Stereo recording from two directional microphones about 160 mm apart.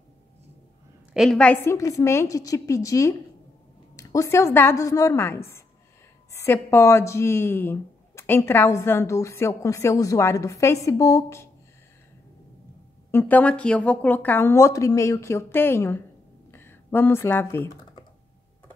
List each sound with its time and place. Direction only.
1.1 s a woman's voice: 5° right (ahead or behind)
1.4 s a woman's voice: 15° left (ahead or behind)
13.1 s speech: 10° left (ahead or behind)
16.5 s computer keyboard: 15° left (ahead or behind)